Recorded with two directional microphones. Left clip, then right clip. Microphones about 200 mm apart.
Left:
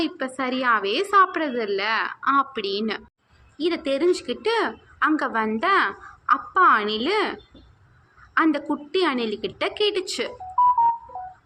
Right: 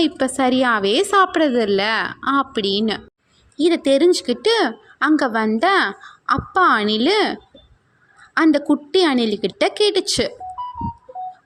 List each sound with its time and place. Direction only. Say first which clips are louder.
0.0 s a woman's voice: right 8 dB; 45° right (ahead or behind)
8.4 s a woman's voice: right 5 dB; 45° right (ahead or behind)